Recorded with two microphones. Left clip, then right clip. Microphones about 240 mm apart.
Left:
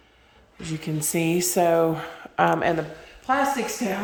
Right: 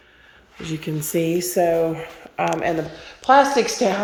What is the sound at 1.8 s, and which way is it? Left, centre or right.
Speech, left.